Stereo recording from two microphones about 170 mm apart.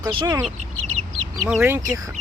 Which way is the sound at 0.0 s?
30° right (ahead or behind).